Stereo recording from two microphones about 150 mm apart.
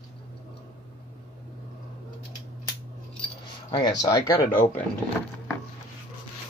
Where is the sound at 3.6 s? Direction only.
25° left (ahead or behind).